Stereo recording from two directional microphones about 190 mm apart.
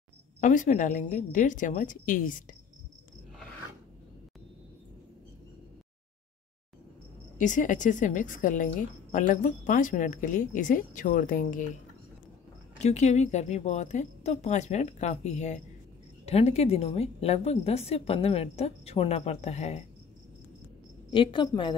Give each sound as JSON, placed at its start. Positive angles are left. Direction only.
{"t": 0.4, "sound": "a woman's voice", "side_deg": 40}
{"t": 7.3, "sound": "a woman's voice", "side_deg": 40}
{"t": 12.8, "sound": "a woman's voice", "side_deg": 35}
{"t": 21.1, "sound": "a woman's voice", "side_deg": 25}